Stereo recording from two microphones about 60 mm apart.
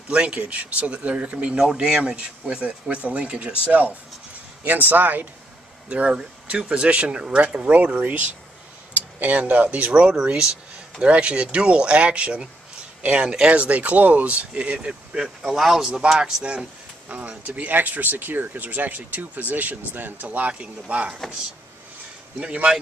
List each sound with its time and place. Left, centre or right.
0.1 s speech: centre
5.9 s speech: centre
17.1 s speech: right
22.4 s speech: centre